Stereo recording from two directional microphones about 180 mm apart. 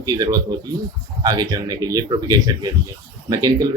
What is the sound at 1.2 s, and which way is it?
Speech, 20° right (ahead or behind).